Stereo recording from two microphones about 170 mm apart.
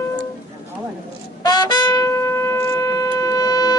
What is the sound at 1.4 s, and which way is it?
Wind instrument, 25° left (ahead or behind).